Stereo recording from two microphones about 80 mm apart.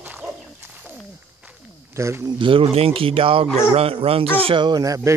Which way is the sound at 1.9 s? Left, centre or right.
Right.